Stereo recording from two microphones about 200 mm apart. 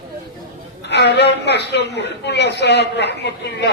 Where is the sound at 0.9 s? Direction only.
60° left (ahead or behind).